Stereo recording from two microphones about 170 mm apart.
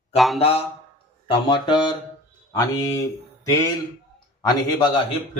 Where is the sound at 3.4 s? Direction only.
20° left (ahead or behind).